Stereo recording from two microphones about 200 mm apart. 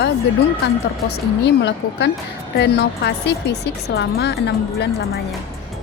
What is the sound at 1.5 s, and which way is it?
A woman's voice, 60° left (ahead or behind).